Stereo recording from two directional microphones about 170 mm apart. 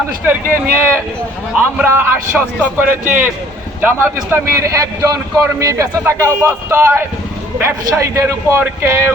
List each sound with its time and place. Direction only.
0.3 s a man's voice: 15° right (ahead or behind)